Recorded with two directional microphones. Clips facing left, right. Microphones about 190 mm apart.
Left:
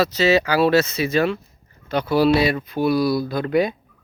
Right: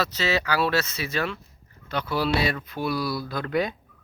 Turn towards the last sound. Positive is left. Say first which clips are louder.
# left 6 dB
turn(degrees=15)  # may be behind; listen again after turning